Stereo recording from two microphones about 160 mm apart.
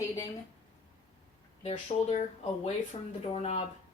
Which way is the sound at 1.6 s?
35° left (ahead or behind).